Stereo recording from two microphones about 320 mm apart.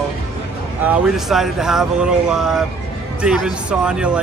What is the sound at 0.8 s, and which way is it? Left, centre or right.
Speech, centre.